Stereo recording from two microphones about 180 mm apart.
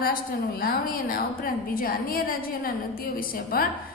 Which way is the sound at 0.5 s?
55° left (ahead or behind).